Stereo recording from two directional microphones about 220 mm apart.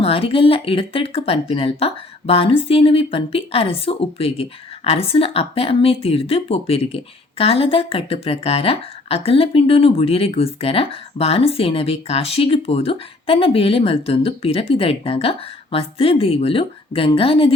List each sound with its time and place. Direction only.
0.0 s speech: 25° left (ahead or behind)